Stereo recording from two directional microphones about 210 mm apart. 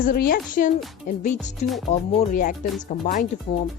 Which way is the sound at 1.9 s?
35° left (ahead or behind).